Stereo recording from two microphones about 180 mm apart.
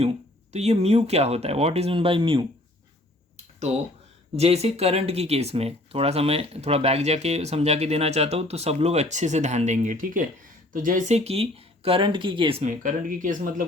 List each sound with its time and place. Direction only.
0.5 s speech: 35° right (ahead or behind)
4.4 s speech: 35° right (ahead or behind)
12.6 s speech: 45° right (ahead or behind)